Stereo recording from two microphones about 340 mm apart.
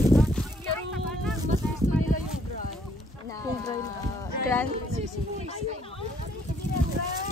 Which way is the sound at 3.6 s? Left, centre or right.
Centre.